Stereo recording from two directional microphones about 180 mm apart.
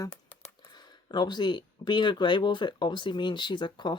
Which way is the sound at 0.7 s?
25° left (ahead or behind).